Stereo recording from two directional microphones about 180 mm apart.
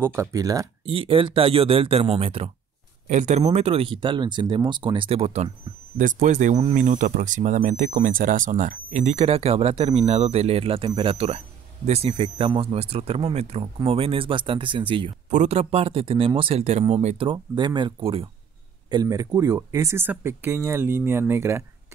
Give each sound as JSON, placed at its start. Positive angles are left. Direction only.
{"t": 0.0, "sound": "speech", "side_deg": -15}
{"t": 0.8, "sound": "speech", "side_deg": -30}
{"t": 17.3, "sound": "speech", "side_deg": -25}